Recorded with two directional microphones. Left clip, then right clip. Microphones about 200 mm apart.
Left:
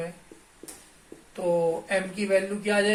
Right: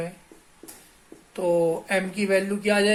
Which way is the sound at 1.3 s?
55° right (ahead or behind).